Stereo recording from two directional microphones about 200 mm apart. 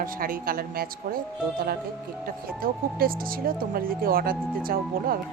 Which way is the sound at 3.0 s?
45° right (ahead or behind).